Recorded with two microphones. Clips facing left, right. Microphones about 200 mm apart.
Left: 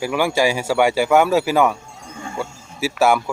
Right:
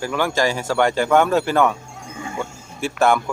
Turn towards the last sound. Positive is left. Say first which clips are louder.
# left 1 dB
turn(degrees=5)  # may be behind; listen again after turning